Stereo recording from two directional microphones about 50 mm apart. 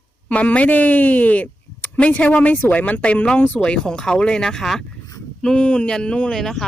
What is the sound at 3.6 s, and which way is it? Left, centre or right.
Speech, centre.